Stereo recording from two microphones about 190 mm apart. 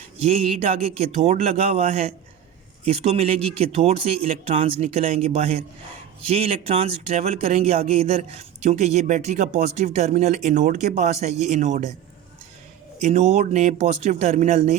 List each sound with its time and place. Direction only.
0.2 s speech: 35° right (ahead or behind)
13.0 s speech: 35° right (ahead or behind)